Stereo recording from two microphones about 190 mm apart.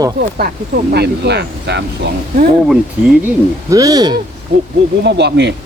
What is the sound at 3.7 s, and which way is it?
Speech, 20° right (ahead or behind).